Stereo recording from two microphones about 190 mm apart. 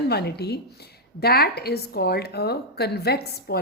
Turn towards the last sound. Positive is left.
turn(degrees=55)  # may be behind; listen again after turning